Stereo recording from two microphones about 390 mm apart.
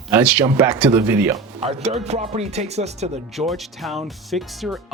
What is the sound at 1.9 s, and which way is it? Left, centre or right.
Speech, centre.